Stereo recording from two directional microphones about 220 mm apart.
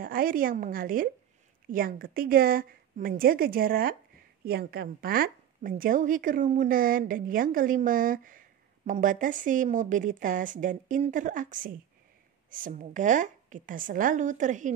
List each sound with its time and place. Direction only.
0.0 s a woman's voice: 40° right (ahead or behind)